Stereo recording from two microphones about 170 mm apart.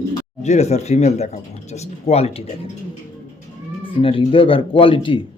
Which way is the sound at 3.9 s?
30° left (ahead or behind).